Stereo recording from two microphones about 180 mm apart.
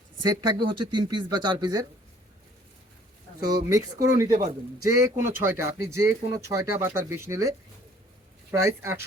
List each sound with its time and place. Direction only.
0.3 s speech: 25° right (ahead or behind)
3.4 s speech: 20° right (ahead or behind)
8.5 s speech: 15° right (ahead or behind)